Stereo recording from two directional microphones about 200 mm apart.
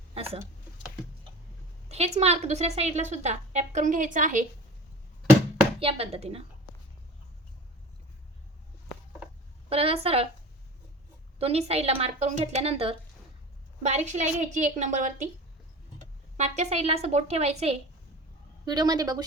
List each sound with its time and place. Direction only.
1.9 s a woman's voice: 30° right (ahead or behind)
5.8 s speech: 30° right (ahead or behind)
9.6 s speech: 30° right (ahead or behind)
11.3 s a woman's voice: 30° right (ahead or behind)
16.4 s a woman's voice: 35° right (ahead or behind)
18.6 s speech: 20° right (ahead or behind)